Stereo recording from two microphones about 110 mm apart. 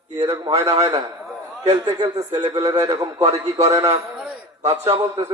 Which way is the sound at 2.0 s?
40° right (ahead or behind).